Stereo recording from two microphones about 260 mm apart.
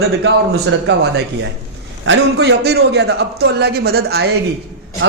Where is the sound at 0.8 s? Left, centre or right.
Right.